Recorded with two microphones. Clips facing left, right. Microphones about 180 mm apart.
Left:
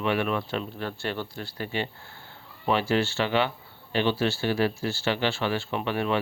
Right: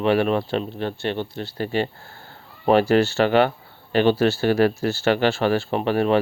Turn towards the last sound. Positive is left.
turn(degrees=-40)  # may be behind; listen again after turning